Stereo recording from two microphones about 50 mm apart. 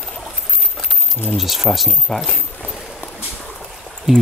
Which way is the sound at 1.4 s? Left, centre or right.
Centre.